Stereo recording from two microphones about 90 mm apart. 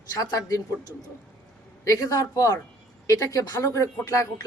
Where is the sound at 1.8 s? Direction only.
40° left (ahead or behind).